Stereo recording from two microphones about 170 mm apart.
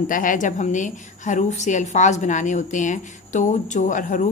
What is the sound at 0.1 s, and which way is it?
A woman's voice, 50° left (ahead or behind).